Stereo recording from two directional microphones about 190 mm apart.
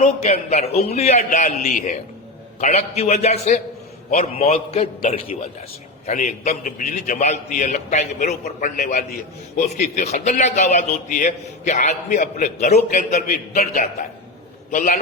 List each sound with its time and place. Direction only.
0.0 s a man's voice: 40° left (ahead or behind)